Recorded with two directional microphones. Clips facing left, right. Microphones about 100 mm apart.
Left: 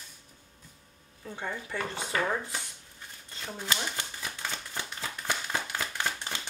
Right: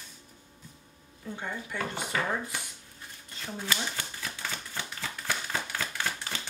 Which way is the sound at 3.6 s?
15° left (ahead or behind).